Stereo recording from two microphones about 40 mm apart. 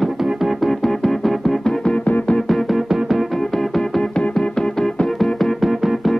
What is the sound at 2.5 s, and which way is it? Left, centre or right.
Music, centre.